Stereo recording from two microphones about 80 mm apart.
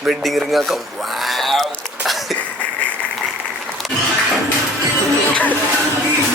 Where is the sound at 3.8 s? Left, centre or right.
Centre.